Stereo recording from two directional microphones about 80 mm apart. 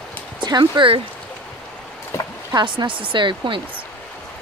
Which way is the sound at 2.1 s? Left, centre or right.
Left.